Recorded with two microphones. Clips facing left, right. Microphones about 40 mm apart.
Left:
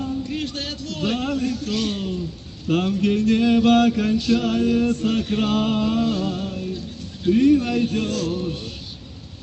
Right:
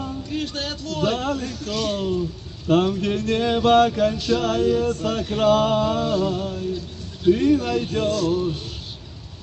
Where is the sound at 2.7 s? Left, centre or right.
Right.